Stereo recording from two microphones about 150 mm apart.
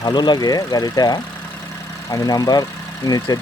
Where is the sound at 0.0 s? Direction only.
30° left (ahead or behind).